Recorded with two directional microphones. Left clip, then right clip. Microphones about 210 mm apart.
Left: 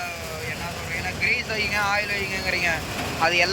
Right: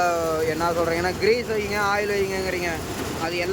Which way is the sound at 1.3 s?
15° right (ahead or behind).